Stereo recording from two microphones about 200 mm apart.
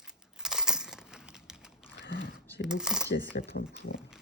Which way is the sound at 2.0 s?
65° left (ahead or behind).